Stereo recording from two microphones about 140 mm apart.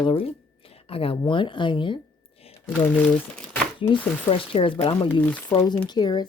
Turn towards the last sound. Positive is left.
turn(degrees=30)  # may be behind; listen again after turning